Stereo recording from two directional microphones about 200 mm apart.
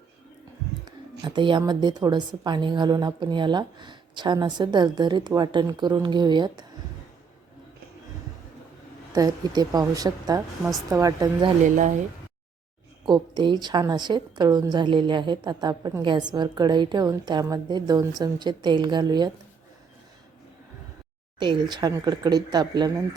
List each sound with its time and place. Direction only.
1.2 s a woman's voice: 25° right (ahead or behind)
9.1 s a woman's voice: 20° right (ahead or behind)
13.1 s a woman's voice: 20° right (ahead or behind)
21.3 s a woman's voice: 20° right (ahead or behind)